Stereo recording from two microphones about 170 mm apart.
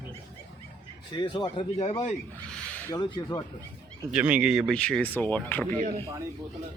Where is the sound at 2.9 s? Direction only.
25° left (ahead or behind).